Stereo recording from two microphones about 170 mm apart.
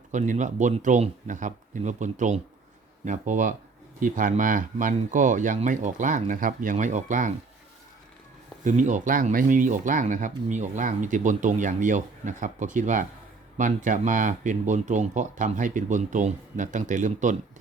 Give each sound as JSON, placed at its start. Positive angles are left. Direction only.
{"t": 0.1, "sound": "speech", "side_deg": -45}
{"t": 8.6, "sound": "speech", "side_deg": -45}